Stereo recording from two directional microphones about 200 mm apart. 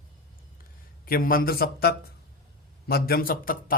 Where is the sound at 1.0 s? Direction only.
45° left (ahead or behind).